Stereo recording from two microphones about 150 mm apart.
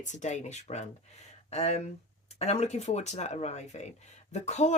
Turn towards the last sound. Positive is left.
turn(degrees=50)  # may be behind; listen again after turning